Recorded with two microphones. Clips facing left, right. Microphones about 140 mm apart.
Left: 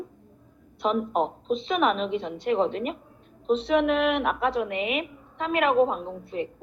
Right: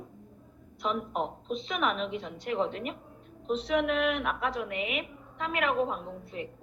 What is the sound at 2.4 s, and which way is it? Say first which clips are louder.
Speech: left 6 dB; 70° left (ahead or behind).